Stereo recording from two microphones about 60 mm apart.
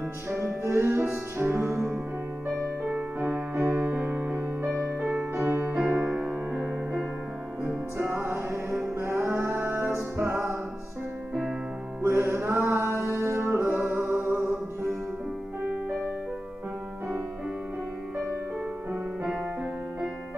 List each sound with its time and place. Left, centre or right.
0.7 s music: right
2.4 s music: centre
2.9 s music: centre
5.7 s music: right
7.6 s music: right
10.1 s music: right
12.0 s music: right
13.7 s music: right
15.6 s music: right
19.2 s music: centre